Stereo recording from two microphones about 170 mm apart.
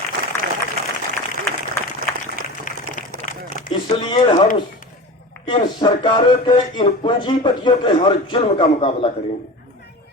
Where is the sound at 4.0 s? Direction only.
30° left (ahead or behind).